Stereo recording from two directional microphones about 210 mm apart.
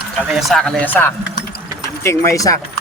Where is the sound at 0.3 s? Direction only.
Centre (ahead or behind).